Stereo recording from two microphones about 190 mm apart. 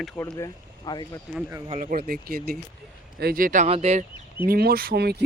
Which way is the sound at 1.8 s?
50° right (ahead or behind).